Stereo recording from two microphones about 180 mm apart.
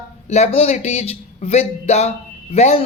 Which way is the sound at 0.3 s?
40° left (ahead or behind).